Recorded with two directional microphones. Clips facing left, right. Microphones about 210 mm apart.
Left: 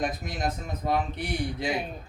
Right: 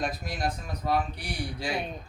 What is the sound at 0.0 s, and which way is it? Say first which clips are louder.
A man's voice: left 1 dB; 20° left (ahead or behind).